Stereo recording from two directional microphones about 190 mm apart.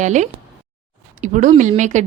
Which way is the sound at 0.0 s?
40° right (ahead or behind).